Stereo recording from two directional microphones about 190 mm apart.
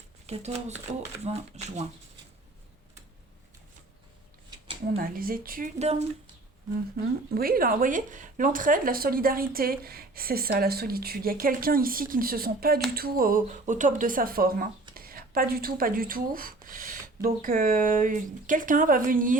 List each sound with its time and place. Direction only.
0.3 s speech: 35° right (ahead or behind)
4.9 s speech: 50° right (ahead or behind)
7.3 s speech: 50° right (ahead or behind)